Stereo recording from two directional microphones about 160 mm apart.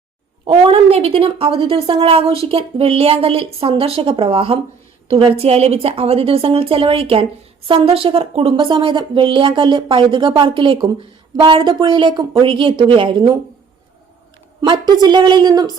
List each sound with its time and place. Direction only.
0.4 s speech: 35° right (ahead or behind)
14.6 s a woman's voice: 25° right (ahead or behind)